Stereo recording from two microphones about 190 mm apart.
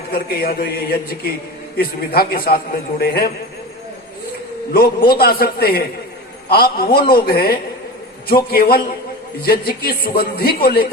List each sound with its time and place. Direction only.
0.1 s a man's voice: 50° left (ahead or behind)
4.7 s a man's voice: 50° left (ahead or behind)